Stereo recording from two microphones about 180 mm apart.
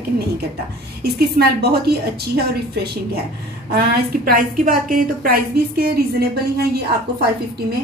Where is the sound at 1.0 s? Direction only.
60° right (ahead or behind).